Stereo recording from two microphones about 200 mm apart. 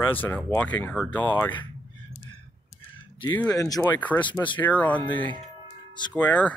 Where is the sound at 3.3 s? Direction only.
10° left (ahead or behind).